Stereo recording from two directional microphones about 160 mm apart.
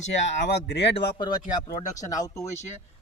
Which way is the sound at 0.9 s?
25° left (ahead or behind).